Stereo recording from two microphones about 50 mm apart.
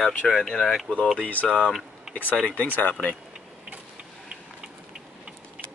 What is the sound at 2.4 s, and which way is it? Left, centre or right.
Speech, left.